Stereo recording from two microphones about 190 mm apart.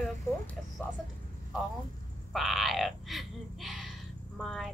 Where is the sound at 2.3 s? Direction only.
Centre (ahead or behind).